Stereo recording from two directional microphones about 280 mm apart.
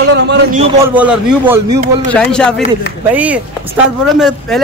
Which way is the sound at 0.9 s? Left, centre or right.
Centre.